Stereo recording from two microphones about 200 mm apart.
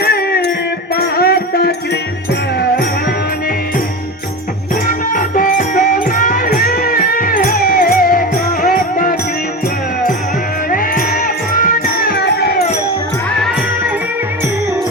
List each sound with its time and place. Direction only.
0.0 s music: 50° left (ahead or behind)
4.9 s music: 40° left (ahead or behind)
10.7 s music: 45° left (ahead or behind)